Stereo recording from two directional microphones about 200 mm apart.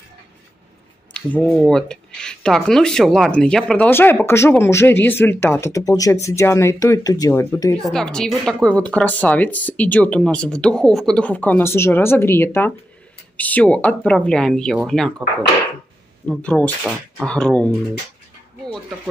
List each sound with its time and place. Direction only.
1.1 s speech: 5° left (ahead or behind)
7.8 s speech: 5° left (ahead or behind)
16.3 s speech: 5° left (ahead or behind)